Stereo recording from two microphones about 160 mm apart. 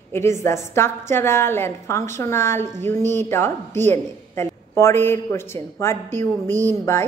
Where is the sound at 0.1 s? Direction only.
15° left (ahead or behind).